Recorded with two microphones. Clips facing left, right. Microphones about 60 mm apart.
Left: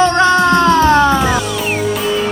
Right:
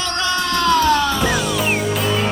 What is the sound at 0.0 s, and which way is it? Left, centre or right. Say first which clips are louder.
Music: left 11 dB; left.